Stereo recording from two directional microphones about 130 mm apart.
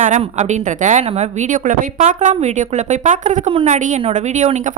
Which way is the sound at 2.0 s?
60° right (ahead or behind).